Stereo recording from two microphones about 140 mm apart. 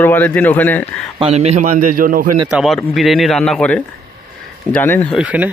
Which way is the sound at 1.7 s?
85° right.